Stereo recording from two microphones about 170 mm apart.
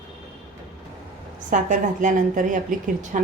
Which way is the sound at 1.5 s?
50° right (ahead or behind).